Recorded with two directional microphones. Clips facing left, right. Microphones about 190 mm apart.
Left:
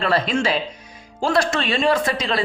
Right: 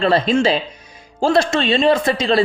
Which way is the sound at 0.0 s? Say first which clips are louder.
Right 5 dB; 25° right (ahead or behind).